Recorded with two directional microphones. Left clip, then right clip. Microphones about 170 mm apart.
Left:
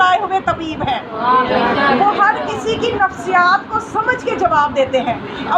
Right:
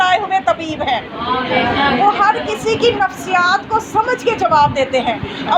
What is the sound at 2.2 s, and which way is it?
A woman's voice, 30° right (ahead or behind).